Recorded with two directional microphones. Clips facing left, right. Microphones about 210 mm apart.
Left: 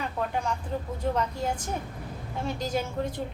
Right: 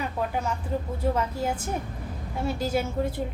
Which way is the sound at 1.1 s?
5° right (ahead or behind).